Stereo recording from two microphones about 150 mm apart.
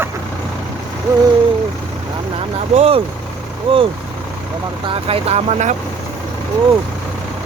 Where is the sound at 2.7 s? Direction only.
40° right (ahead or behind).